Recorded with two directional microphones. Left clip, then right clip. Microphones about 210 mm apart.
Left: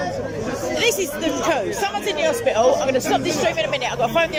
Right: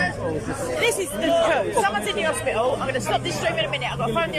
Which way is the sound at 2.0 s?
15° left (ahead or behind).